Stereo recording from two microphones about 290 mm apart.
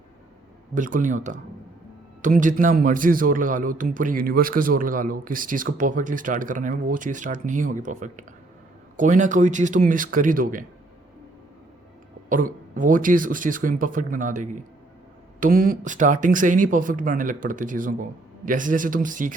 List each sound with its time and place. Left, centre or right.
0.7 s a man's voice: right
12.3 s a man's voice: right